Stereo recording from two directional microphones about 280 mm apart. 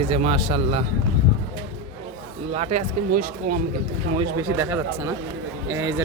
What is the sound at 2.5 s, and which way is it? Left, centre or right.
Speech, right.